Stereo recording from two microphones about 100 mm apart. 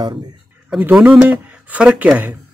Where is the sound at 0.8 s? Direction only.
15° right (ahead or behind).